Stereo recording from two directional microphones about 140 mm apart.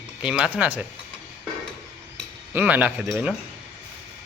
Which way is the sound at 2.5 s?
10° right (ahead or behind).